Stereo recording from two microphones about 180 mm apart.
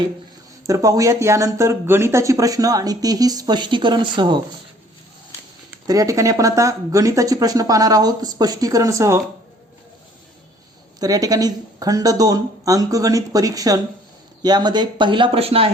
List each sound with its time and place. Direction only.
0.7 s speech: 20° right (ahead or behind)
5.9 s speech: 20° right (ahead or behind)
11.0 s speech: 20° right (ahead or behind)